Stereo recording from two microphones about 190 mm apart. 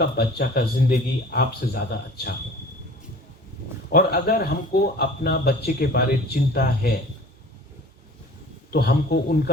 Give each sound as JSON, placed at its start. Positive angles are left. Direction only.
{"t": 0.0, "sound": "speech", "side_deg": 55}
{"t": 3.9, "sound": "speech", "side_deg": 55}
{"t": 8.7, "sound": "speech", "side_deg": 55}